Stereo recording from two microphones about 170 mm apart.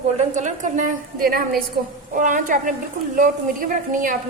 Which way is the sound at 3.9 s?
50° right (ahead or behind).